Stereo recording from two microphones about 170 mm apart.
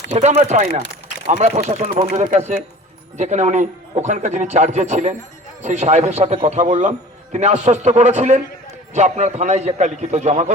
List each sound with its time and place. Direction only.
0.1 s a man's voice: 40° right (ahead or behind)